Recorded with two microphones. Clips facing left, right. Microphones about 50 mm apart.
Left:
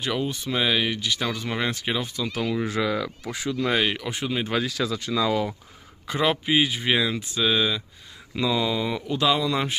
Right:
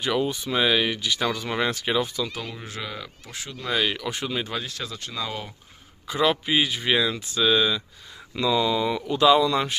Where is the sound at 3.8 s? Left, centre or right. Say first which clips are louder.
Left 1 dB; centre.